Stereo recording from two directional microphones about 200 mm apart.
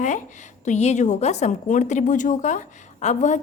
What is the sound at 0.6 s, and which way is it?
A woman's voice, 35° left (ahead or behind).